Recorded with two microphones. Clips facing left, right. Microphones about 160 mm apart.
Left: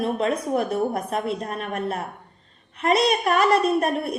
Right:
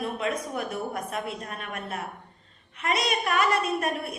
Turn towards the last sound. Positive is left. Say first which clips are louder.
# left 6 dB
turn(degrees=40)  # may be behind; listen again after turning